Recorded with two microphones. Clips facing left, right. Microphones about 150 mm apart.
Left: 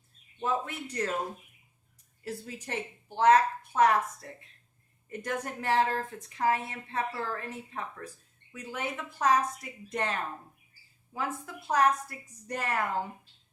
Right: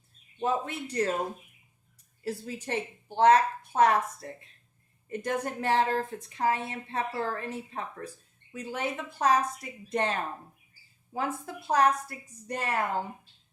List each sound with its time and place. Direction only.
0.4 s a woman's voice: 30° right (ahead or behind)
2.2 s a woman's voice: 30° right (ahead or behind)